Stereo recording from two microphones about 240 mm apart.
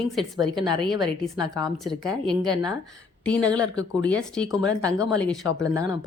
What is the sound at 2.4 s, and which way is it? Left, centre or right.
Speech, centre.